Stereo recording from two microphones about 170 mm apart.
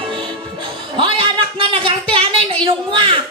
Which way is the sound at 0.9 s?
30° right (ahead or behind).